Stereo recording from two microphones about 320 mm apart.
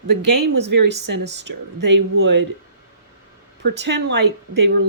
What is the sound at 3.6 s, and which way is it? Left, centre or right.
Speech, right.